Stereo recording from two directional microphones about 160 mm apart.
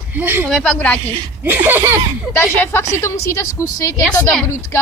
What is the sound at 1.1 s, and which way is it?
Laughter, 10° right (ahead or behind).